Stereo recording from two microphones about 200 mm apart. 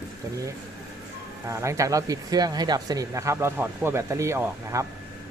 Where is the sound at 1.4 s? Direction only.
15° right (ahead or behind).